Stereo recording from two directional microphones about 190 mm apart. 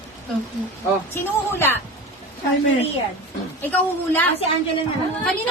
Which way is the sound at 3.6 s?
10° left (ahead or behind).